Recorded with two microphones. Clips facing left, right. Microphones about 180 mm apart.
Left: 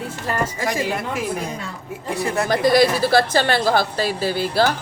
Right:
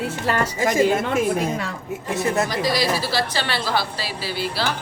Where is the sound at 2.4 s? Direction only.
50° left (ahead or behind).